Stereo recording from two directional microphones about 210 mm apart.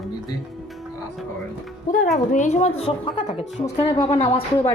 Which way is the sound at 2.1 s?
35° left (ahead or behind).